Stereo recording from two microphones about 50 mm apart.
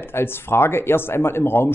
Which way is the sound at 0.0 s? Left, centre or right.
Left.